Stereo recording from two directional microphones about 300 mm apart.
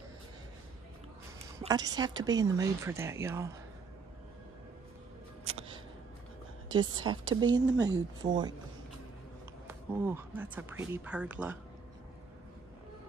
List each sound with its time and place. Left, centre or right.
1.6 s speech: centre
5.4 s a sound: right
6.7 s speech: centre
9.7 s speech: centre